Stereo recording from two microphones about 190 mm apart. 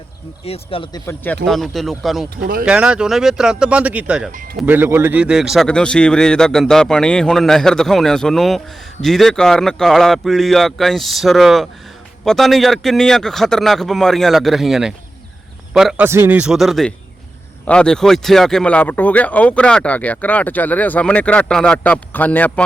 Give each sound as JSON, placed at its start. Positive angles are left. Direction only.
{"t": 0.4, "sound": "speech", "side_deg": 30}
{"t": 1.0, "sound": "a man's voice", "side_deg": 10}
{"t": 2.4, "sound": "speech", "side_deg": -50}
{"t": 2.6, "sound": "a man's voice", "side_deg": -5}
{"t": 4.3, "sound": "speech", "side_deg": -45}
{"t": 4.6, "sound": "a man's voice", "side_deg": -10}
{"t": 16.0, "sound": "a man's voice", "side_deg": -15}